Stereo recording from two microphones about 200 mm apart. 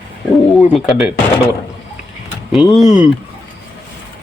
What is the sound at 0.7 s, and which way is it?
Speech, centre (ahead or behind).